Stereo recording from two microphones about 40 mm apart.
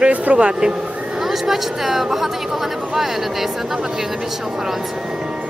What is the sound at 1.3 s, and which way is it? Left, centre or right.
A woman's voice, centre.